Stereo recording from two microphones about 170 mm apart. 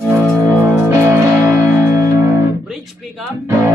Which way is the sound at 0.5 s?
15° right (ahead or behind).